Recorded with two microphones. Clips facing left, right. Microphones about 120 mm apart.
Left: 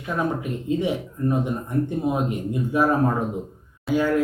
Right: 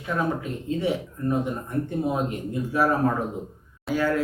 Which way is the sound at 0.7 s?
15° left (ahead or behind).